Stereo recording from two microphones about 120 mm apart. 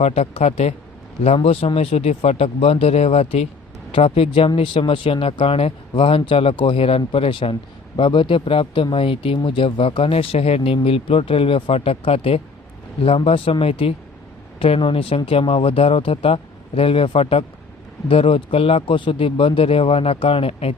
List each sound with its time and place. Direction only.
0.0 s speech: 60° left (ahead or behind)